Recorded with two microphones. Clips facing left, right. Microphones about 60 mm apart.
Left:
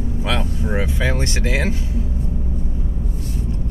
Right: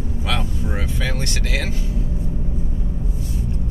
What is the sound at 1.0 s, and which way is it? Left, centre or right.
Speech, left.